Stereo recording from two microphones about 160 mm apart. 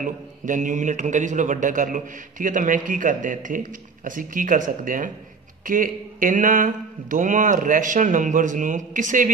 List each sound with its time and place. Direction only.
0.0 s a man's voice: 55° right (ahead or behind)